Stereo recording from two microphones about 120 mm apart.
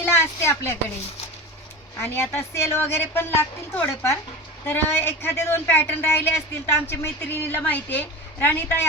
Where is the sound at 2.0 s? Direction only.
20° left (ahead or behind).